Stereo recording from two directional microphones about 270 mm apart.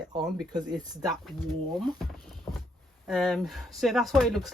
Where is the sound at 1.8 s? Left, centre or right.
Centre.